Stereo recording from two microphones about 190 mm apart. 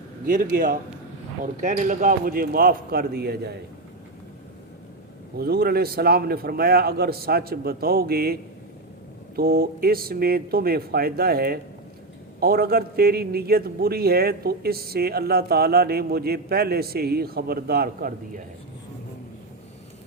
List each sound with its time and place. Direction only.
0.3 s speech: 45° right (ahead or behind)
5.4 s a man's voice: 55° right (ahead or behind)